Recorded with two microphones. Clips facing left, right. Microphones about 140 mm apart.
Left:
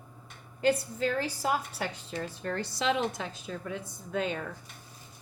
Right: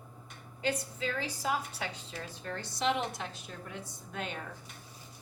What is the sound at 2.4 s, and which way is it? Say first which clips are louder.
Speech: left 2 dB; 85° left.